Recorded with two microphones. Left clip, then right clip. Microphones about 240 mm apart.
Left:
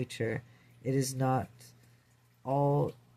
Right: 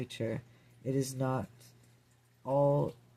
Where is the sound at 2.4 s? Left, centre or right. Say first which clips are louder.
Right 1 dB; left.